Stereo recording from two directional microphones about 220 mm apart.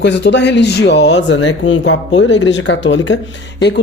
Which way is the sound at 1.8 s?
55° left (ahead or behind).